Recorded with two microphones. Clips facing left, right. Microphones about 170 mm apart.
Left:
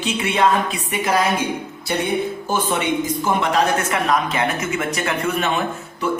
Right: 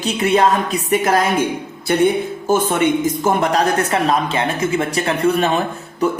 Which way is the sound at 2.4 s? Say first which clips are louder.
Right 8 dB; 50° right (ahead or behind).